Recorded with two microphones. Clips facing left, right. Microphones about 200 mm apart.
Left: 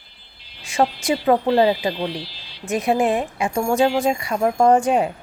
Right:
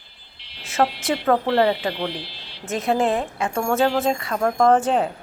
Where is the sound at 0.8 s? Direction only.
15° left (ahead or behind).